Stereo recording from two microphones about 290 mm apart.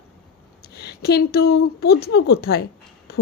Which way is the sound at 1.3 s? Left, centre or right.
Left.